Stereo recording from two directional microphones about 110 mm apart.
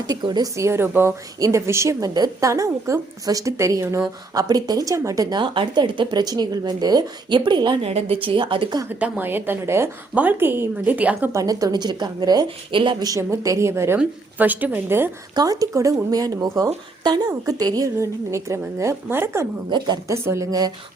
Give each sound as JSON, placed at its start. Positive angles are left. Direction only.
{"t": 0.1, "sound": "speech", "side_deg": -40}
{"t": 7.9, "sound": "speech", "side_deg": -65}
{"t": 8.9, "sound": "a woman's voice", "side_deg": -15}
{"t": 11.3, "sound": "speech", "side_deg": -30}
{"t": 12.7, "sound": "speech", "side_deg": -50}
{"t": 13.1, "sound": "a woman's voice", "side_deg": -30}
{"t": 15.4, "sound": "speech", "side_deg": -35}